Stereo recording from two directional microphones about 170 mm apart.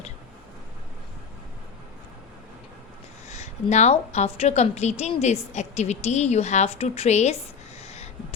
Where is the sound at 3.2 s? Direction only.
40° left (ahead or behind).